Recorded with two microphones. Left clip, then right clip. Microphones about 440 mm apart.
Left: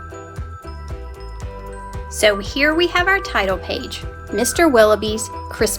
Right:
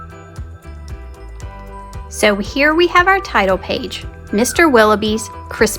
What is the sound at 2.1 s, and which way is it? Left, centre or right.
A woman's voice, centre.